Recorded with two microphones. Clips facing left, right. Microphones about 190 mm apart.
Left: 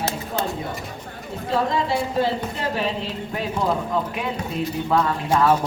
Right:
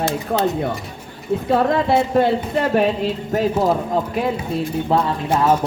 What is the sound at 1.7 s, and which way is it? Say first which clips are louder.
Speech: right 7 dB; 60° right (ahead or behind).